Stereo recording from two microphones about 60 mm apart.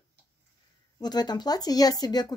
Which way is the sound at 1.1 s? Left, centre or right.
Left.